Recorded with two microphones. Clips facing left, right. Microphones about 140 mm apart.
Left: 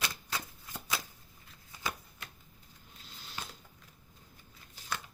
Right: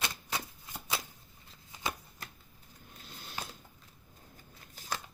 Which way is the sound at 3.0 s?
50° right (ahead or behind).